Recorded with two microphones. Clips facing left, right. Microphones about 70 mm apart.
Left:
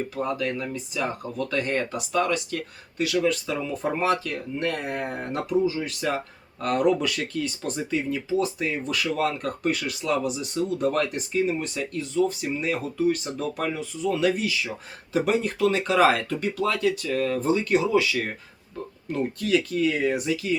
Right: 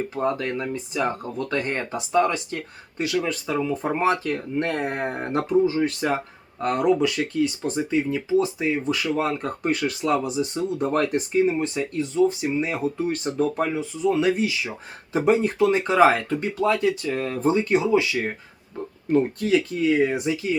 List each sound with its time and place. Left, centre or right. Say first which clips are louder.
0.2 s speech: right 3 dB; right